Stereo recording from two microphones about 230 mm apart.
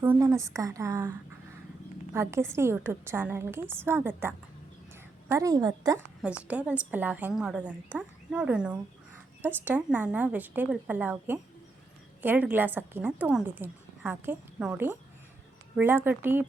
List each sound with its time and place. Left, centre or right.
0.0 s a woman's voice: centre
2.1 s a woman's voice: centre
6.2 s a woman's voice: centre